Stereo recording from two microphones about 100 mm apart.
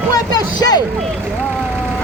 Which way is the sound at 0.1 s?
40° left (ahead or behind).